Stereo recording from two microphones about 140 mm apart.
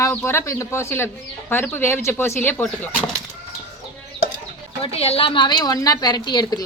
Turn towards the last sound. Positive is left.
turn(degrees=30)  # may be behind; listen again after turning